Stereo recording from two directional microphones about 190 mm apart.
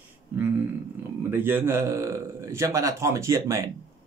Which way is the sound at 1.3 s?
10° right (ahead or behind).